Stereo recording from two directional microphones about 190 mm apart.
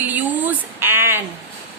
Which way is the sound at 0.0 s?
10° right (ahead or behind).